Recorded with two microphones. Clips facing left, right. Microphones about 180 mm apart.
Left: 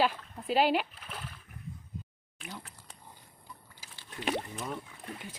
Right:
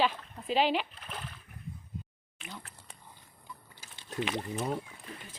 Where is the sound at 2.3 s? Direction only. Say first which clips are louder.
Left 1 dB; centre (ahead or behind).